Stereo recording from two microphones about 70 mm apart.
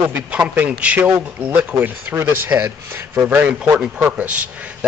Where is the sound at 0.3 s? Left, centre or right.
Centre.